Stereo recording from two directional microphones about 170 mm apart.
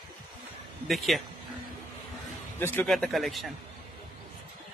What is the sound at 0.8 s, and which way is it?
Speech, centre (ahead or behind).